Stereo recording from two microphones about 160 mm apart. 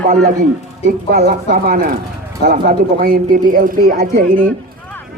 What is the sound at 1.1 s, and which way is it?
Speech, 70° right (ahead or behind).